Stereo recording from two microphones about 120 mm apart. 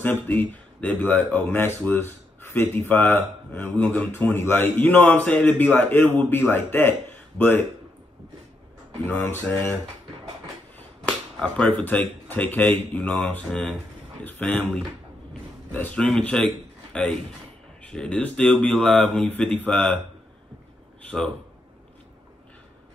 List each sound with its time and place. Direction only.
0.0 s speech: 15° left (ahead or behind)
9.0 s speech: 15° left (ahead or behind)
11.1 s speech: 5° left (ahead or behind)
15.7 s speech: 10° left (ahead or behind)